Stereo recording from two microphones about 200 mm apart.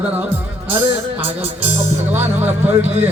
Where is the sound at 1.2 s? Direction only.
30° right (ahead or behind).